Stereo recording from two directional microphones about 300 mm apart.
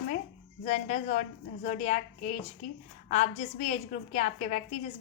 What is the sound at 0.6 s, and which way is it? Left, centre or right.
A woman's voice, left.